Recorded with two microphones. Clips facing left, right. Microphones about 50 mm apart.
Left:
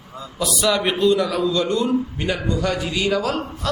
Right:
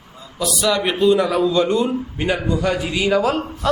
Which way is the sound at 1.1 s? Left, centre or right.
Right.